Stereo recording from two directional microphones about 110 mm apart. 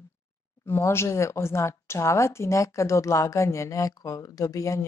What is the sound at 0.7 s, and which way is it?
Speech, 25° left (ahead or behind).